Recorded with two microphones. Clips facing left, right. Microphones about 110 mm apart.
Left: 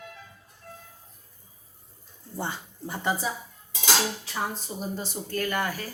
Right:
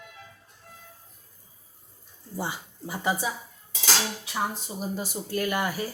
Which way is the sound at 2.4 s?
10° right (ahead or behind).